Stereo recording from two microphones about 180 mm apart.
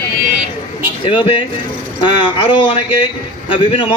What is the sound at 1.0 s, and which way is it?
A man's voice, 30° left (ahead or behind).